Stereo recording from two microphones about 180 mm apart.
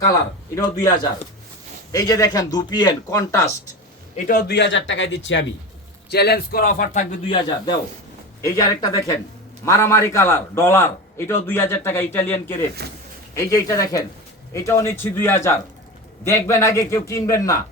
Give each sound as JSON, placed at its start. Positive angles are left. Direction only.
{"t": 0.1, "sound": "speech", "side_deg": 20}
{"t": 4.3, "sound": "speech", "side_deg": 60}
{"t": 6.1, "sound": "speech", "side_deg": 60}
{"t": 7.3, "sound": "a man's voice", "side_deg": 25}